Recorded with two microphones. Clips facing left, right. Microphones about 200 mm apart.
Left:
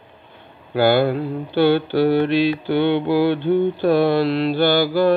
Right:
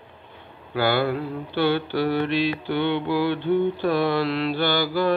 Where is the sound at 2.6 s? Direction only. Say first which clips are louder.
Left 6 dB; 65° left (ahead or behind).